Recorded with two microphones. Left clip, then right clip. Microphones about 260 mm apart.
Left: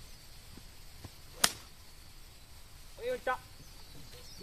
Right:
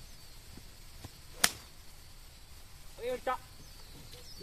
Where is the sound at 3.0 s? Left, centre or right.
Centre.